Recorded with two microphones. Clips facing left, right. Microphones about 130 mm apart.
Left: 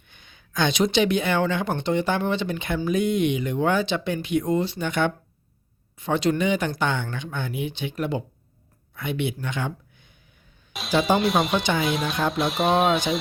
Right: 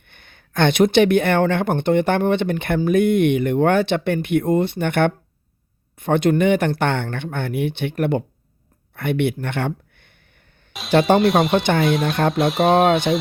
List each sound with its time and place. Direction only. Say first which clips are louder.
0.0 s speech: right 3 dB; 60° right (ahead or behind)
9.0 s a sound: right 7 dB; 60° right (ahead or behind)
10.7 s music: even; centre (ahead or behind)
11.2 s speech: right 6 dB; centre (ahead or behind)
11.6 s speech: right 5 dB; 60° right (ahead or behind)
11.9 s speech: right 6 dB; centre (ahead or behind)